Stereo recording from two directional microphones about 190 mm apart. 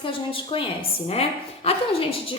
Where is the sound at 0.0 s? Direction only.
25° left (ahead or behind).